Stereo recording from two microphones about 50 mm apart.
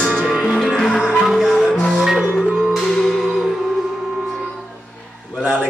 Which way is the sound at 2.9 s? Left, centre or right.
Centre.